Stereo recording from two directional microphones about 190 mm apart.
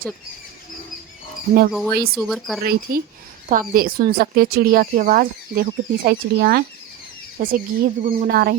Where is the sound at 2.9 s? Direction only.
50° right (ahead or behind).